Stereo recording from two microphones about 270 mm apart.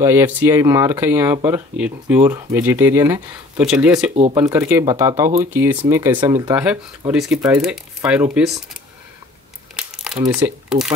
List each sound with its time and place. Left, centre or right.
0.0 s speech: centre
4.1 s speech: right
4.4 s speech: centre
9.8 s crumpling: centre
10.2 s speech: centre